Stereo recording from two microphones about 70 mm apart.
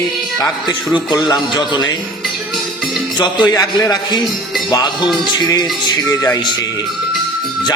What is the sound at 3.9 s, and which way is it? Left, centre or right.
A man's voice, left.